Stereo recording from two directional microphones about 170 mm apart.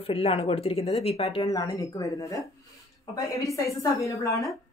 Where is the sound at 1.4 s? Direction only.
20° left (ahead or behind).